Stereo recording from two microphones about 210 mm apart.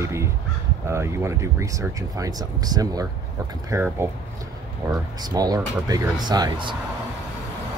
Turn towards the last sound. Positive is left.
turn(degrees=-20)  # may be behind; listen again after turning